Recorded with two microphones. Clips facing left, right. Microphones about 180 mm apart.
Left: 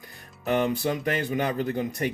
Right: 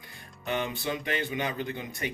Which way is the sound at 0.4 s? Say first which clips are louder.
Left 7 dB; 45° left (ahead or behind).